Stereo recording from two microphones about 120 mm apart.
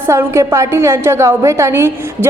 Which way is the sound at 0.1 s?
25° right (ahead or behind).